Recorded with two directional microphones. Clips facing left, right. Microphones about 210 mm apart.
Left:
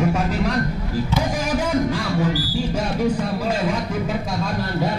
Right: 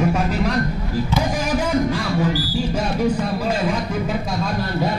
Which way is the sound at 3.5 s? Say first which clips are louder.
Right 1 dB; 15° right (ahead or behind).